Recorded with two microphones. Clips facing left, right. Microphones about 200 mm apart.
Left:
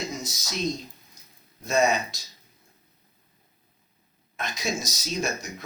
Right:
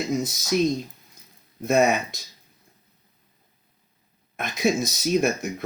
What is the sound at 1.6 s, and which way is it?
Speech, 60° right (ahead or behind).